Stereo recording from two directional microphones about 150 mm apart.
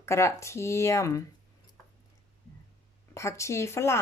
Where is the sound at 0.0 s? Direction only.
20° left (ahead or behind).